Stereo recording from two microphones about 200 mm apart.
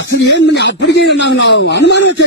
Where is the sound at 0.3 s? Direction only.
60° left (ahead or behind).